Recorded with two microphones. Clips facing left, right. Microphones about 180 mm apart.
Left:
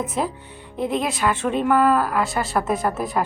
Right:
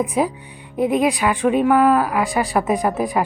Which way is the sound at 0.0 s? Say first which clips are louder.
Right 5 dB; 15° right (ahead or behind).